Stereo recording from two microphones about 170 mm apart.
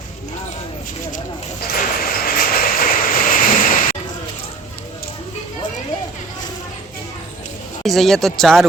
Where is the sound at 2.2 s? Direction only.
60° left (ahead or behind).